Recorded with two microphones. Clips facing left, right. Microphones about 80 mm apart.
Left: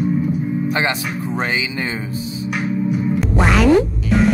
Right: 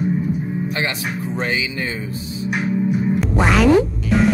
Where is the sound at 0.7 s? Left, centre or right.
Left.